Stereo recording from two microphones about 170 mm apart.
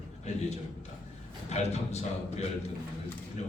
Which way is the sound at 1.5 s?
40° left (ahead or behind).